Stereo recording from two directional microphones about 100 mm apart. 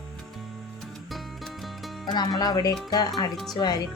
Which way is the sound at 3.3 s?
Centre (ahead or behind).